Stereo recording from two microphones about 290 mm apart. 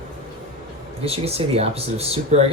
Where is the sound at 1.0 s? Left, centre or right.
Right.